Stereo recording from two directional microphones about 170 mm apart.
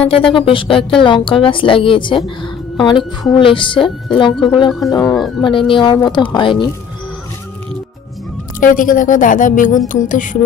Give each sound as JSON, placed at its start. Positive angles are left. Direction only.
{"t": 0.1, "sound": "a woman's voice", "side_deg": 30}
{"t": 8.5, "sound": "speech", "side_deg": 50}